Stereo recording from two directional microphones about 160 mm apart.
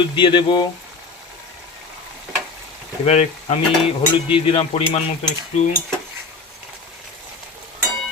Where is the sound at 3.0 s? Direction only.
40° left (ahead or behind).